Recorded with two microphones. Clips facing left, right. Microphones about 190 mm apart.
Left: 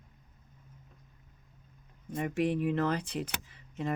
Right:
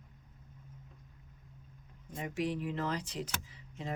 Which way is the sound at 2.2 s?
55° left (ahead or behind).